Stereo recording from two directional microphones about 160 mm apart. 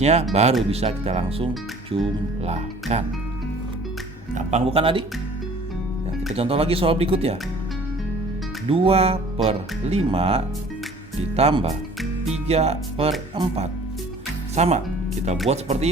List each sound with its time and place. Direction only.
0.0 s speech: 45° right (ahead or behind)
4.4 s speech: 40° right (ahead or behind)
6.3 s speech: 35° right (ahead or behind)
8.7 s speech: 35° right (ahead or behind)